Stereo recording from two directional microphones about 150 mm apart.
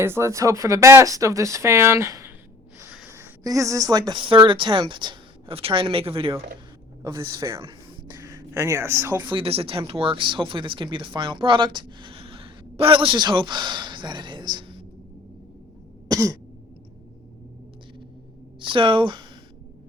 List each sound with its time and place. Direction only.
0.0 s speech: 15° right (ahead or behind); by 6.3 s 40° right (ahead or behind)
7.3 s speech: 20° right (ahead or behind)
9.1 s speech: 35° right (ahead or behind)
16.0 s throat clearing: 25° right (ahead or behind)
18.6 s speech: 35° right (ahead or behind)